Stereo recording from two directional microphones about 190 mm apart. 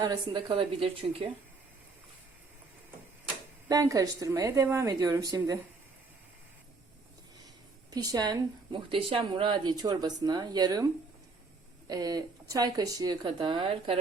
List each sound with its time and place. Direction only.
0.0 s speech: 25° right (ahead or behind)
3.7 s speech: 20° right (ahead or behind)
7.9 s speech: 20° right (ahead or behind)
11.9 s speech: 20° right (ahead or behind)